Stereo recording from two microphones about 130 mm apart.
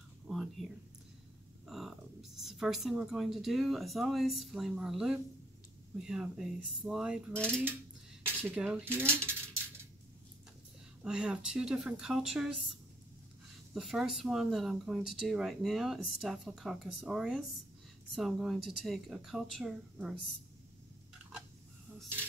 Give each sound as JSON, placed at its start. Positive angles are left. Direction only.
{"t": 0.3, "sound": "a sound", "side_deg": 0}
{"t": 1.7, "sound": "speech", "side_deg": 0}
{"t": 8.3, "sound": "cutlery", "side_deg": -15}
{"t": 11.0, "sound": "speech", "side_deg": -5}
{"t": 13.7, "sound": "speech", "side_deg": 0}